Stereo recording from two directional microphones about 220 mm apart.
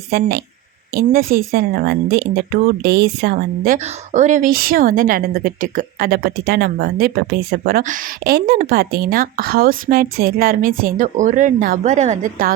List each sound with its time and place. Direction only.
0.1 s a woman's voice: 45° right (ahead or behind)